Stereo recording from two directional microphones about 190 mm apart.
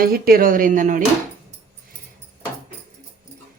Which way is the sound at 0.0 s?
50° right (ahead or behind).